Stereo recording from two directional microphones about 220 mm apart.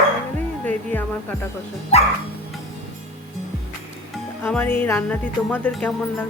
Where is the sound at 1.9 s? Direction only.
30° left (ahead or behind).